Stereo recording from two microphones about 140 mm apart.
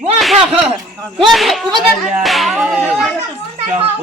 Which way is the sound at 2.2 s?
Centre (ahead or behind).